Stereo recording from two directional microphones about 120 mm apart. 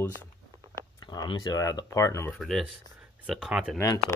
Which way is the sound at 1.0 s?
35° left (ahead or behind).